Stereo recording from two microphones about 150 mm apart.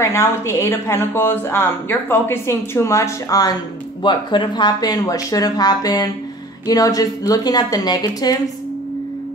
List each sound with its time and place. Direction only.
0.0 s speech: 20° left (ahead or behind)